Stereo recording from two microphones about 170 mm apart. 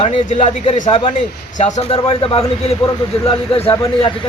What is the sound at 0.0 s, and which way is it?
A man's voice, 40° left (ahead or behind).